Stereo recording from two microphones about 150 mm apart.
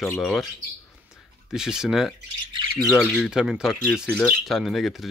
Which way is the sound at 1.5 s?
5° right (ahead or behind).